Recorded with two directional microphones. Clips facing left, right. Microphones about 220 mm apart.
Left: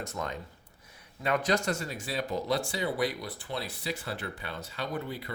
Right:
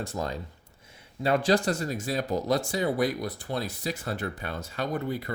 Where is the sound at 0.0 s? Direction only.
35° right (ahead or behind).